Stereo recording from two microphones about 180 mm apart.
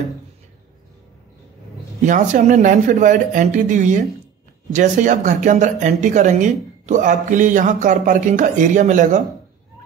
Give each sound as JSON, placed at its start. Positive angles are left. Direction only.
{"t": 2.0, "sound": "speech", "side_deg": -45}